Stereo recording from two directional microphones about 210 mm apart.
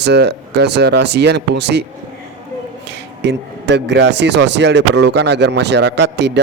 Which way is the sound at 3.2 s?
55° right (ahead or behind).